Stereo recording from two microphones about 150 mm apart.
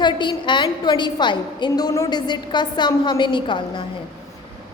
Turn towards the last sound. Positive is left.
turn(degrees=35)  # may be behind; listen again after turning